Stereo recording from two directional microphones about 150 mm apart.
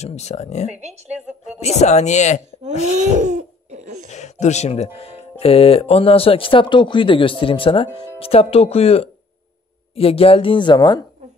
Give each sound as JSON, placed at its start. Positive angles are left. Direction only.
{"t": 0.0, "sound": "speech", "side_deg": 50}
{"t": 0.7, "sound": "speech", "side_deg": -50}
{"t": 1.6, "sound": "speech", "side_deg": 45}
{"t": 3.2, "sound": "laughter", "side_deg": -55}
{"t": 4.1, "sound": "speech", "side_deg": 50}